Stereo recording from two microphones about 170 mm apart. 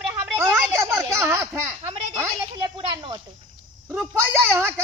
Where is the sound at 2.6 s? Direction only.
30° right (ahead or behind).